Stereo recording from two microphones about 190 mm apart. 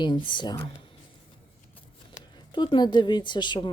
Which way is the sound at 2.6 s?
25° left (ahead or behind).